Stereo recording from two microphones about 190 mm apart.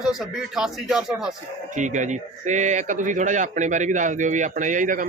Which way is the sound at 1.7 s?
40° right (ahead or behind).